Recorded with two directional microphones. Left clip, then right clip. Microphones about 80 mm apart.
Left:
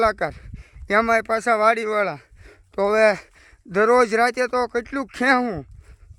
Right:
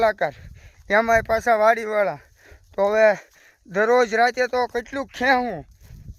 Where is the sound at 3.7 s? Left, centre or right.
Left.